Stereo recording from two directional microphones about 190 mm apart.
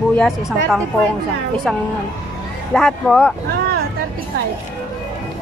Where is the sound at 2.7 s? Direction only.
5° left (ahead or behind).